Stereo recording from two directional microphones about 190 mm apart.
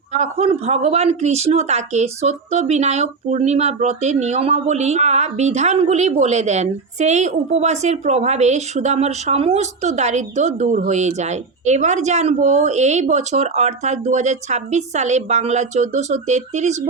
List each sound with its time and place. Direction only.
0.1 s speech: 35° right (ahead or behind)